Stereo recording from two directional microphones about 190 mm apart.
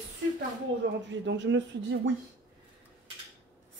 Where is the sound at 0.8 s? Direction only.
75° right (ahead or behind).